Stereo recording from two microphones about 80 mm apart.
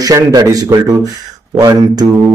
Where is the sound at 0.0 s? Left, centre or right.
Right.